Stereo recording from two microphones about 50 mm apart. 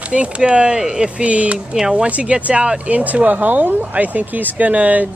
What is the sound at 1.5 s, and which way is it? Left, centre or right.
Speech, centre.